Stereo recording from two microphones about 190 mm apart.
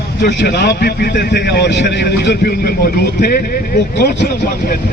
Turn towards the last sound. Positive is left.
turn(degrees=50)  # may be behind; listen again after turning